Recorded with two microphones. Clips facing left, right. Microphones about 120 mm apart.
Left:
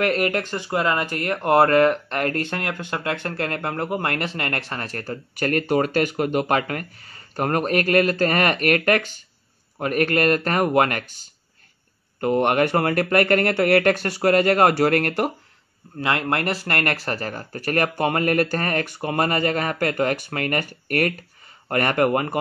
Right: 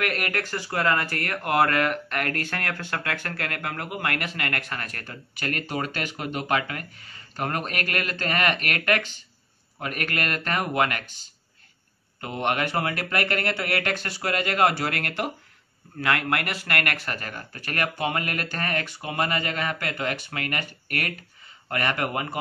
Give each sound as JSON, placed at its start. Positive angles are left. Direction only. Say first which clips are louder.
{"t": 0.0, "sound": "speech", "louder": "left 7 dB", "side_deg": 30}
{"t": 12.2, "sound": "speech", "louder": "left 8 dB", "side_deg": 45}
{"t": 16.0, "sound": "speech", "louder": "left 3 dB", "side_deg": 25}